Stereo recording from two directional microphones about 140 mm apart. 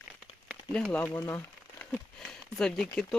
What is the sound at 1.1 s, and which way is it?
Crumpling, 20° left (ahead or behind).